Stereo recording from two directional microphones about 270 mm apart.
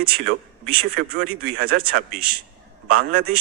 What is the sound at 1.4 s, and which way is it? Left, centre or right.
Speech, right.